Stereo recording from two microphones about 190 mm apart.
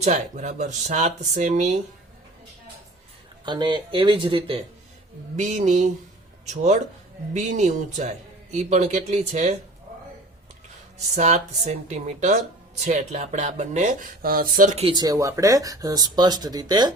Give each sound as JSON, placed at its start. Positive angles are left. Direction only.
{"t": 0.0, "sound": "speech", "side_deg": -40}
{"t": 3.4, "sound": "speech", "side_deg": -25}
{"t": 10.9, "sound": "speech", "side_deg": -35}
{"t": 14.8, "sound": "speech", "side_deg": -25}